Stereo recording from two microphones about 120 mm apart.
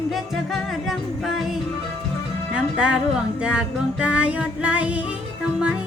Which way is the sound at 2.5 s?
5° right (ahead or behind).